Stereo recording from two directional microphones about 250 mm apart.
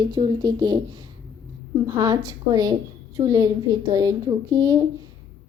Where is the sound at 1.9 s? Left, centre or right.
Centre.